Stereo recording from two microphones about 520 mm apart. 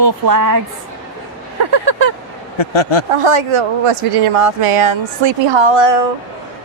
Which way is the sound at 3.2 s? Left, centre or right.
Right.